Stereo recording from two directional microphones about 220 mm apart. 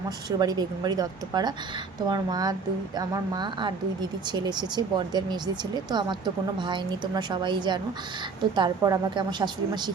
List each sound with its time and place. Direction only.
0.3 s speech: 20° right (ahead or behind)